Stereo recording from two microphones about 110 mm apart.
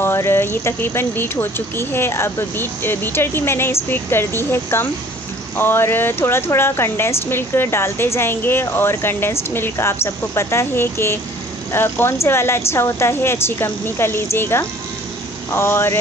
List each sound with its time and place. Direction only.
0.0 s speech: 20° left (ahead or behind)